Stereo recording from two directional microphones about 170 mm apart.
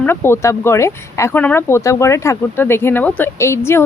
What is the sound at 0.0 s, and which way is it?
Speech, 15° left (ahead or behind).